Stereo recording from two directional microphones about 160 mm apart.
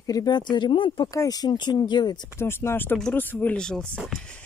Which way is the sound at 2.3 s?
15° left (ahead or behind).